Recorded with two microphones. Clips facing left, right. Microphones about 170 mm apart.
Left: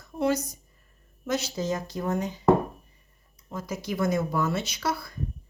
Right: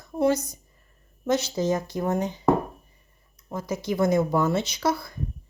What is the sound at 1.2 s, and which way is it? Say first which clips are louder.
Speech: right 5 dB; 20° right (ahead or behind).